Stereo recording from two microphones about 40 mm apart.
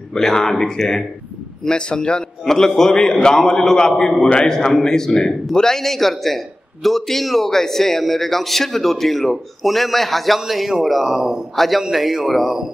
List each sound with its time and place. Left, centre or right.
0.1 s a man's voice: centre
2.4 s a man's voice: centre